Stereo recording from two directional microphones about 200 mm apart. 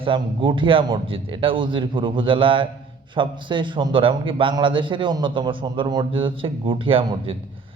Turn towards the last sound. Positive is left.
turn(degrees=-25)  # may be behind; listen again after turning